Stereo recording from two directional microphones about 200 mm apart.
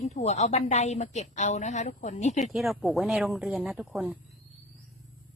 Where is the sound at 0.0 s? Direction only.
35° left (ahead or behind).